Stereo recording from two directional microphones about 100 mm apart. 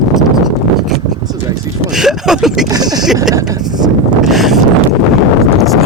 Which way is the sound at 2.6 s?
40° right (ahead or behind).